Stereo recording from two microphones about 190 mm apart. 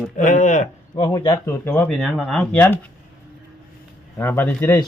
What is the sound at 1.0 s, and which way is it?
Speech, 20° left (ahead or behind).